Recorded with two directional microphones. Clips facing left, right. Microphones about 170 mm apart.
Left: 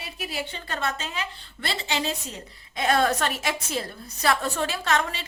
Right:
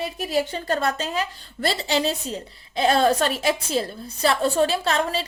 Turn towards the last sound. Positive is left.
turn(degrees=-30)  # may be behind; listen again after turning